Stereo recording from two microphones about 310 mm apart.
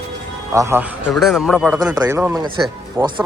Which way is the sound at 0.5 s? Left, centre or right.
Centre.